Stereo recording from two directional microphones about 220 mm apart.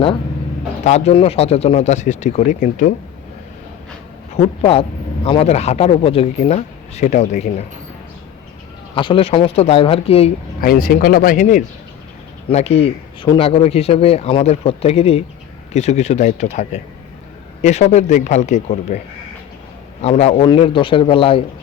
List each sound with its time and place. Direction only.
0.9 s speech: 30° left (ahead or behind)
4.4 s speech: 25° left (ahead or behind)
9.0 s speech: 25° left (ahead or behind)
10.6 s speech: 40° left (ahead or behind); by 21.4 s 25° left (ahead or behind)